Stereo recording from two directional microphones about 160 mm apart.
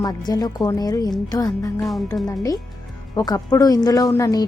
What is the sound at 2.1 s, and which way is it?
Speech, 20° left (ahead or behind).